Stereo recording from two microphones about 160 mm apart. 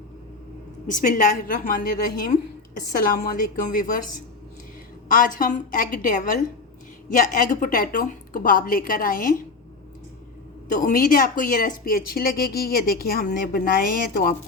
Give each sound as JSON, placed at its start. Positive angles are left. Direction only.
{"t": 0.9, "sound": "a woman's voice", "side_deg": 55}
{"t": 5.0, "sound": "a woman's voice", "side_deg": 60}
{"t": 10.7, "sound": "a woman's voice", "side_deg": 55}